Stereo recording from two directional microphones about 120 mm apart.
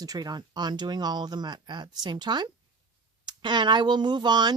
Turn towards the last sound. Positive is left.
turn(degrees=-40)  # may be behind; listen again after turning